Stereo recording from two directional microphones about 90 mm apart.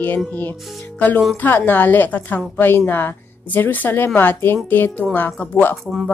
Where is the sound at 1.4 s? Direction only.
20° left (ahead or behind).